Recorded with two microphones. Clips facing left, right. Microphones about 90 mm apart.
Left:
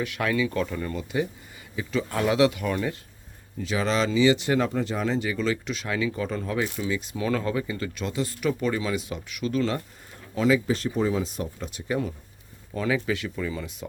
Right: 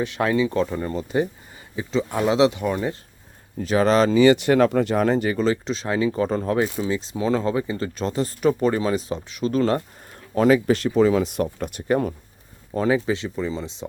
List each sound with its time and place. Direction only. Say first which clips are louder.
0.0 s speech: right 5 dB; 30° right (ahead or behind)
1.7 s speech: right 4 dB; 25° right (ahead or behind)
3.6 s speech: right 7 dB; 45° right (ahead or behind)
10.7 s speech: right 7 dB; 80° right; by 12.1 s 50° right (ahead or behind)
12.7 s speech: right 5 dB; 35° right (ahead or behind)